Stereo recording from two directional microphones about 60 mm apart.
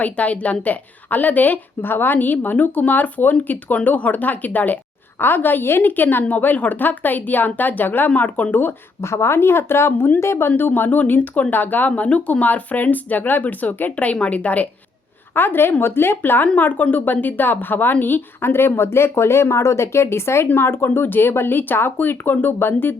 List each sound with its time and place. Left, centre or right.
0.0 s a woman's voice: left
9.0 s speech: left
10.6 s a woman's voice: left
15.4 s a woman's voice: left
16.6 s a woman's voice: left